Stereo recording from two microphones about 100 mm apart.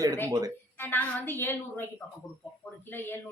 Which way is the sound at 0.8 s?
20° left (ahead or behind).